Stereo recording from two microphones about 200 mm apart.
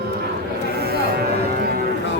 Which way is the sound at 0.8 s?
50° right (ahead or behind).